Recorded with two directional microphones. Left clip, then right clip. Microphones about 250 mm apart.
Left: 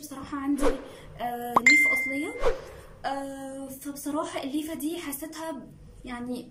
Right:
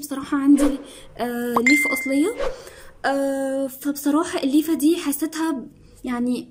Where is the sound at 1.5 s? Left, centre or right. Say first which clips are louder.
Right 1 dB; centre.